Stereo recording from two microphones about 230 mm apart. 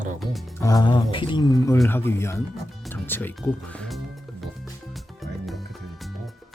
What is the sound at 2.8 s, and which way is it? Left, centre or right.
Music, centre.